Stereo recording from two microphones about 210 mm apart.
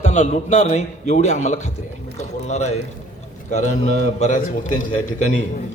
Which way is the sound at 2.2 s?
35° left (ahead or behind).